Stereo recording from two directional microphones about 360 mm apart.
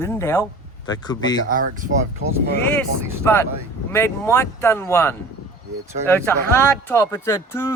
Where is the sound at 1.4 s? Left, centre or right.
Right.